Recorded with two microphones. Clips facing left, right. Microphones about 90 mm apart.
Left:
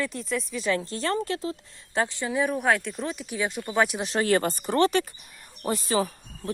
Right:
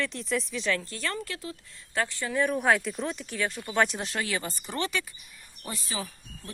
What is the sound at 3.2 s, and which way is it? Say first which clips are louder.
Speech: left 3 dB; 15° left (ahead or behind).